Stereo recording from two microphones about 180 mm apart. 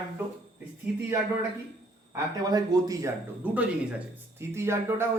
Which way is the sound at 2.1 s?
20° right (ahead or behind).